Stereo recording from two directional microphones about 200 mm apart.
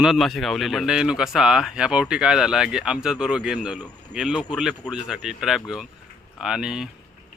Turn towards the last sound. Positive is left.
turn(degrees=-5)  # may be behind; listen again after turning